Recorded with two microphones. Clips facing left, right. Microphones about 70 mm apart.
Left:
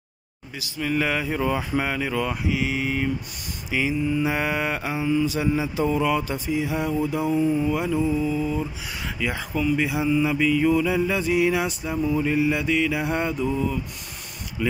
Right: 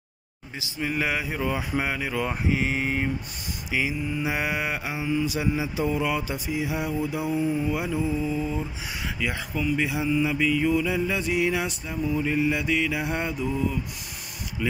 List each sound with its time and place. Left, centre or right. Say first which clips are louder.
0.6 s mantra: left 3 dB; centre
2.2 s mantra: left 1 dB; right
3.7 s mantra: left 4 dB; centre
9.0 s mantra: left 2 dB; centre
14.6 s mantra: left 3 dB; centre